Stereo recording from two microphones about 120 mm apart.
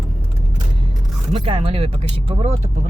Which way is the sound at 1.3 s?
50° right (ahead or behind).